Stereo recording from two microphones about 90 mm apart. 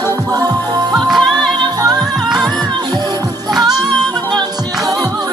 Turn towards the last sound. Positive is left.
turn(degrees=-50)  # may be behind; listen again after turning